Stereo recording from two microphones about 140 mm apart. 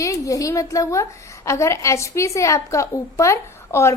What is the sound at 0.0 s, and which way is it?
Speech, 25° left (ahead or behind).